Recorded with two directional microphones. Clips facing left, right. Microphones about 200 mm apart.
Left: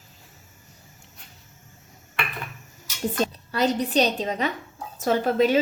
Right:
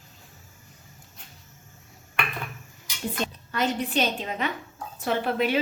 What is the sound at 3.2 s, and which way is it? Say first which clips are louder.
A woman's voice: left 4 dB; 35° left (ahead or behind).